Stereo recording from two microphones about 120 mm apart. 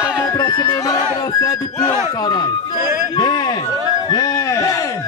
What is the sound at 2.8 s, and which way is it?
Music, 20° right (ahead or behind).